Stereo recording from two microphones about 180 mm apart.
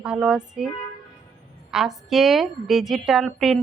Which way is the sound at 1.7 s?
Centre (ahead or behind).